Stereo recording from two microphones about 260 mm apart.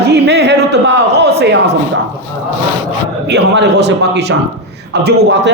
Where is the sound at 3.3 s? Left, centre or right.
Right.